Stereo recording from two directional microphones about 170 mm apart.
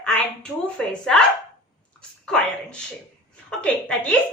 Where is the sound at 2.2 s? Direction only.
5° left (ahead or behind).